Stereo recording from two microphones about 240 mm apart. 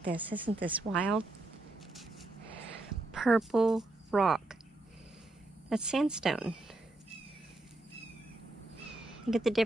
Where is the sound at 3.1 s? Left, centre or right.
Centre.